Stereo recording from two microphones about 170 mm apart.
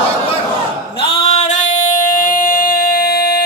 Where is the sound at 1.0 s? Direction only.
40° left (ahead or behind).